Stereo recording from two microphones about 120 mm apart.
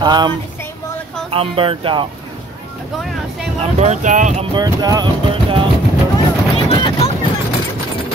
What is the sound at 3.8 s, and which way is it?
Speech, 80° right.